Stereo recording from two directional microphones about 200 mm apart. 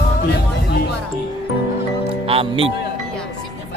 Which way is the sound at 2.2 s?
30° right (ahead or behind).